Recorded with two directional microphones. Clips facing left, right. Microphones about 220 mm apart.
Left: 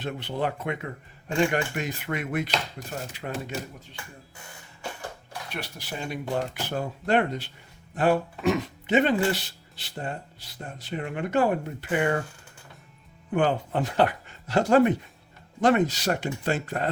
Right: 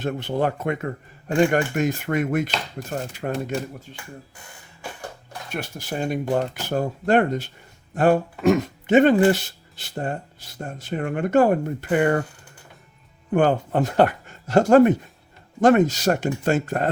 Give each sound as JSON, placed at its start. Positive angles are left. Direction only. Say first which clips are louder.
{"t": 0.0, "sound": "speech", "louder": "right 6 dB", "side_deg": -45}
{"t": 5.5, "sound": "speech", "louder": "right 7 dB", "side_deg": -45}
{"t": 13.3, "sound": "speech", "louder": "right 5 dB", "side_deg": -45}